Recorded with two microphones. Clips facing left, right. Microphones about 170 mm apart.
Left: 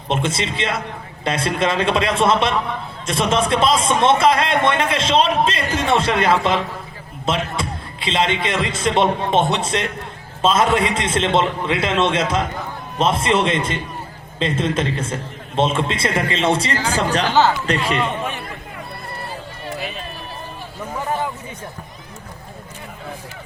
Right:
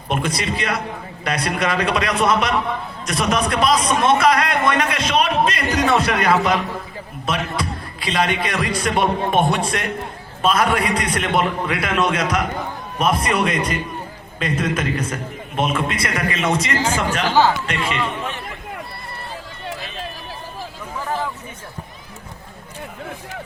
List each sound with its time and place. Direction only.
0.1 s a man's voice: 25° left (ahead or behind)